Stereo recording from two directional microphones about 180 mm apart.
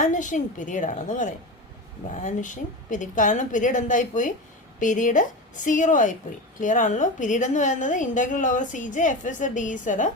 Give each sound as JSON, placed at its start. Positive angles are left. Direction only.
{"t": 0.0, "sound": "a woman's voice", "side_deg": 45}